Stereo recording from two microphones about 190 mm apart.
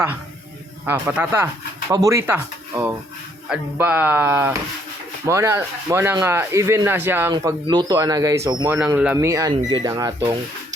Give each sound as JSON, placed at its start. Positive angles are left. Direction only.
{"t": 0.9, "sound": "speech", "side_deg": -10}
{"t": 7.3, "sound": "speech", "side_deg": -20}
{"t": 9.1, "sound": "speech", "side_deg": -15}